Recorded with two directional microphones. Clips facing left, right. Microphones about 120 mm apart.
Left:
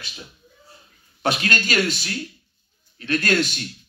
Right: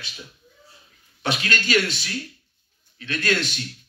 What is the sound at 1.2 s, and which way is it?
A man's voice, 45° left (ahead or behind).